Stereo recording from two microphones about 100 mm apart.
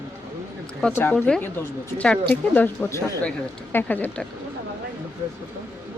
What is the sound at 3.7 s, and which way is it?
Speech, 15° left (ahead or behind).